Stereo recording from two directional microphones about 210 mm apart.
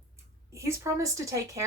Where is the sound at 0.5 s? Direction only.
15° right (ahead or behind).